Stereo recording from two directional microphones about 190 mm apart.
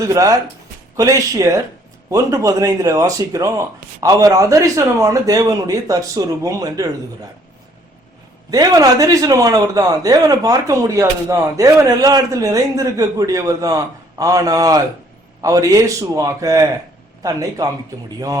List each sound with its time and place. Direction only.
0.0 s speech: 15° right (ahead or behind)
8.4 s a man's voice: 20° right (ahead or behind)